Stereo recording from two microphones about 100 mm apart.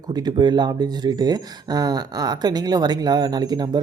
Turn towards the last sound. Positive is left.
turn(degrees=-40)  # may be behind; listen again after turning